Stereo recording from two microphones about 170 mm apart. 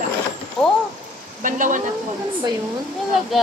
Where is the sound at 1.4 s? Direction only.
50° right (ahead or behind).